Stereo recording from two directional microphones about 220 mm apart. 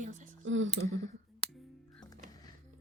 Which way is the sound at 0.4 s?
60° right (ahead or behind).